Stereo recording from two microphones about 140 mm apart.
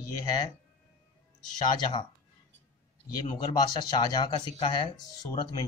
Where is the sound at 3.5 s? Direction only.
30° left (ahead or behind).